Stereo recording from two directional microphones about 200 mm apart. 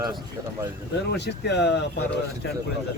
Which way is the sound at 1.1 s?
60° left (ahead or behind).